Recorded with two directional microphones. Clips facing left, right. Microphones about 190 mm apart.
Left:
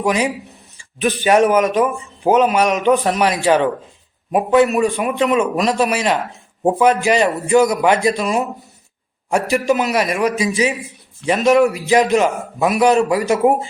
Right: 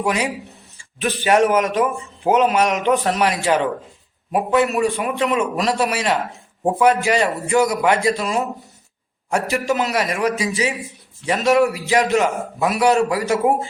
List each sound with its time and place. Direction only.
0.9 s a man's voice: 15° left (ahead or behind)
9.5 s a man's voice: 20° left (ahead or behind)